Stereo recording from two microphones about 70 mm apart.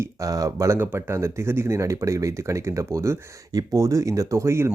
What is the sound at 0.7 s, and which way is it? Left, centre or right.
Speech, right.